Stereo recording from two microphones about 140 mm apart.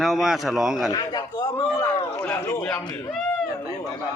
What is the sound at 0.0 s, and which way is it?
Speech, centre (ahead or behind).